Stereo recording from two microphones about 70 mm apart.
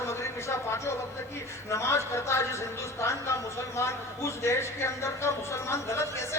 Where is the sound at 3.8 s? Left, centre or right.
Left.